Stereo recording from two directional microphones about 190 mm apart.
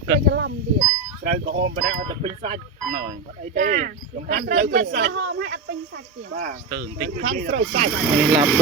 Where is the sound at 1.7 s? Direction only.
45° right (ahead or behind).